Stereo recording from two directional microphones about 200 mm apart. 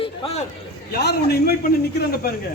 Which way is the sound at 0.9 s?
55° left (ahead or behind).